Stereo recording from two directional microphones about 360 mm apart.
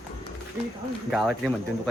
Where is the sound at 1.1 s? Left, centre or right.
Centre.